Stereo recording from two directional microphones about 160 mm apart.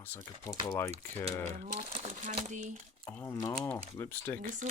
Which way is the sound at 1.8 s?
35° right (ahead or behind).